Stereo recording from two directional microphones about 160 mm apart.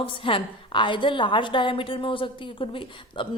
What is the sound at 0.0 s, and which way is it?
A woman's voice, 35° left (ahead or behind).